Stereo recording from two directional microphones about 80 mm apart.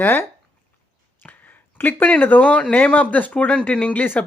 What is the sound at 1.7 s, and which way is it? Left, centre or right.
Speech, left.